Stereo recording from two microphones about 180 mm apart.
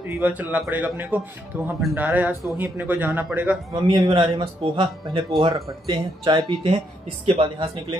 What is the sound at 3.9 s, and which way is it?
Speech, 25° right (ahead or behind).